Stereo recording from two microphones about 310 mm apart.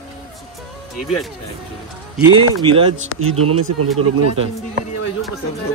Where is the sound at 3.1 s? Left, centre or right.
Right.